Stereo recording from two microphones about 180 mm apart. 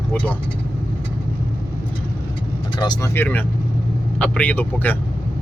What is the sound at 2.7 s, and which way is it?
Speech, 25° left (ahead or behind).